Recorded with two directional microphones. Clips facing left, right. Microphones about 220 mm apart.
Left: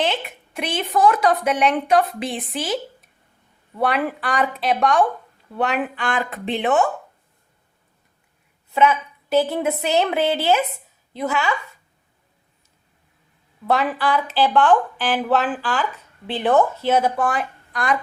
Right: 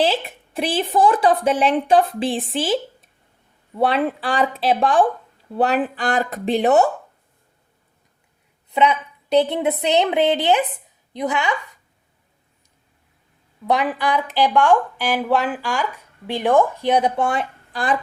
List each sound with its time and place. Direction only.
0.0 s a woman's voice: 35° right (ahead or behind)
3.8 s a woman's voice: 25° right (ahead or behind)
8.7 s a woman's voice: 20° right (ahead or behind)
13.7 s a woman's voice: 15° right (ahead or behind)